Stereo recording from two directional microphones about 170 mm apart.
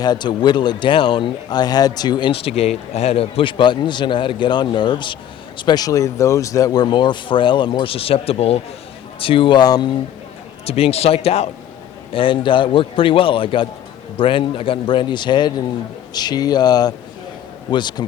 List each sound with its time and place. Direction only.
0.0 s speech: 25° left (ahead or behind)
10.7 s a man's voice: 35° left (ahead or behind)